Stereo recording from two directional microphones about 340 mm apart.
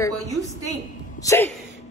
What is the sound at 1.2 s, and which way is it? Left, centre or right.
Speech, centre.